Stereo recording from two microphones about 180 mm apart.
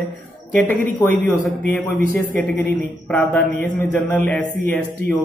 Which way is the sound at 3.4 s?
50° right (ahead or behind).